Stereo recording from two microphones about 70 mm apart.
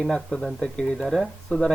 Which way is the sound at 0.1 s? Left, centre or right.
Centre.